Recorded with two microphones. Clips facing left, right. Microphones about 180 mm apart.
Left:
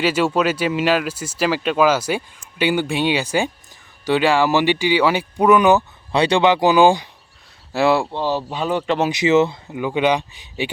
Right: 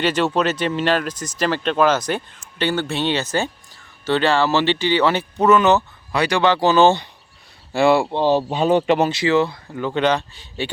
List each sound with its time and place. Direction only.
0.0 s speech: 5° left (ahead or behind)
6.1 s speech: 25° left (ahead or behind); by 8.0 s centre (ahead or behind)
8.0 s speech: 20° right (ahead or behind)
9.0 s speech: 20° left (ahead or behind)